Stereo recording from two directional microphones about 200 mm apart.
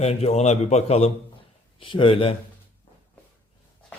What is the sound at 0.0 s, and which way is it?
A man's voice, 30° left (ahead or behind).